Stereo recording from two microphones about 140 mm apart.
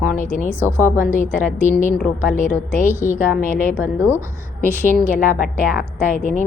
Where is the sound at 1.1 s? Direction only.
65° left (ahead or behind).